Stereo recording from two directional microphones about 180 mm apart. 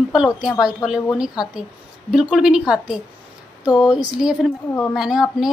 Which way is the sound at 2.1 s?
Centre (ahead or behind).